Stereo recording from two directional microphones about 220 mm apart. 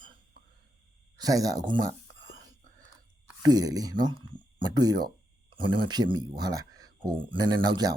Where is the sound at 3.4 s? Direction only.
20° right (ahead or behind).